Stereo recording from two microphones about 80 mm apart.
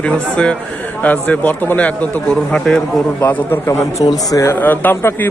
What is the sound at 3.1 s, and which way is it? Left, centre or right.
Speech, left.